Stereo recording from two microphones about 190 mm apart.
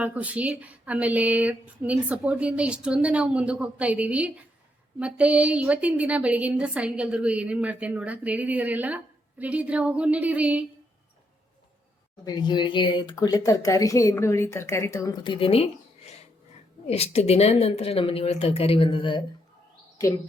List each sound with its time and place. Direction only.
0.0 s speech: 10° right (ahead or behind)
12.2 s speech: 20° left (ahead or behind)
16.8 s a woman's voice: 30° left (ahead or behind)